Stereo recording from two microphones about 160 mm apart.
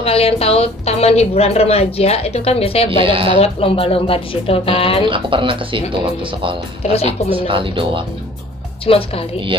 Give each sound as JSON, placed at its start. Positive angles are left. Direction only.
{"t": 0.0, "sound": "a woman's voice", "side_deg": 40}
{"t": 2.9, "sound": "speech", "side_deg": -35}
{"t": 3.3, "sound": "a woman's voice", "side_deg": 40}
{"t": 5.0, "sound": "speech", "side_deg": -30}
{"t": 6.8, "sound": "a woman's voice", "side_deg": 40}
{"t": 7.2, "sound": "speech", "side_deg": -35}
{"t": 8.8, "sound": "a woman's voice", "side_deg": 35}